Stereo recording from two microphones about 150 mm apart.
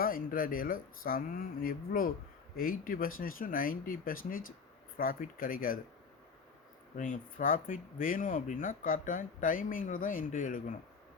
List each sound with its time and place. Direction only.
0.0 s speech: 70° left (ahead or behind)
6.9 s speech: 65° left (ahead or behind)